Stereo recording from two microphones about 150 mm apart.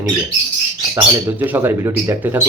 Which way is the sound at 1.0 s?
15° right (ahead or behind).